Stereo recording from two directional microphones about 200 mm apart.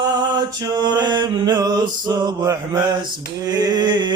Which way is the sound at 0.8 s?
20° right (ahead or behind).